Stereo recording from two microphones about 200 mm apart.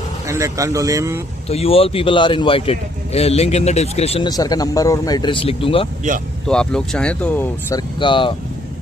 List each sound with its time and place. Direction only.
0.3 s speech: 15° right (ahead or behind)
1.5 s a man's voice: 30° left (ahead or behind)
6.4 s speech: 5° left (ahead or behind)
8.0 s a man's voice: 25° left (ahead or behind)